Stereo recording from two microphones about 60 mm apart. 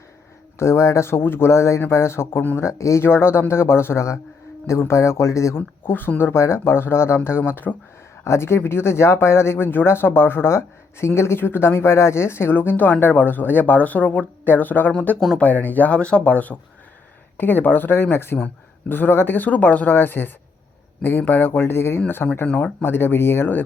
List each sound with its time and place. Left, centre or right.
0.6 s speech: left
3.0 s speech: left
5.5 s speech: left
8.2 s speech: left